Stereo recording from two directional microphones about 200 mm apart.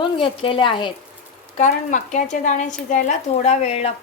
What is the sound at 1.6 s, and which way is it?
Speech, 40° left (ahead or behind).